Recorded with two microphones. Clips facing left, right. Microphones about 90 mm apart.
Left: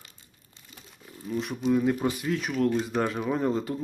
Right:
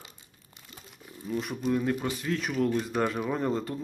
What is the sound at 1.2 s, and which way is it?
Speech, centre (ahead or behind).